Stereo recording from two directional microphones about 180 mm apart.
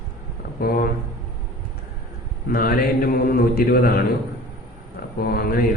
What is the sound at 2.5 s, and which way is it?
A man's voice, 55° left (ahead or behind).